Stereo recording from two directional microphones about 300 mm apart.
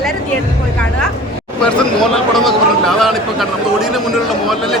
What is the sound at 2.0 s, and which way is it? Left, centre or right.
Speech, centre.